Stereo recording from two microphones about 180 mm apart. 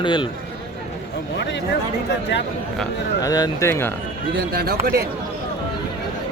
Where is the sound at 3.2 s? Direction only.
20° left (ahead or behind).